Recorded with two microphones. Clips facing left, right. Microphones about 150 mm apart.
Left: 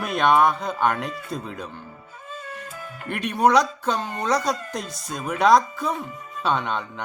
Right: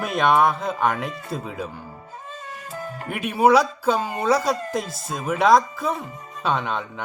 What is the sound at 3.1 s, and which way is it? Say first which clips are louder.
Speech: right 2 dB; 5° right (ahead or behind).